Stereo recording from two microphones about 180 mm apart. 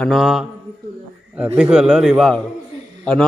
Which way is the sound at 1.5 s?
5° right (ahead or behind).